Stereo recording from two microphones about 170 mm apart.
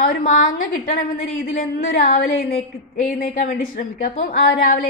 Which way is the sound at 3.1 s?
55° left (ahead or behind).